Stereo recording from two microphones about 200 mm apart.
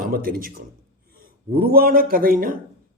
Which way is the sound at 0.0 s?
45° right (ahead or behind).